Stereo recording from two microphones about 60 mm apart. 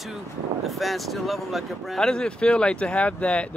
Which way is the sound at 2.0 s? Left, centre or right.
Centre.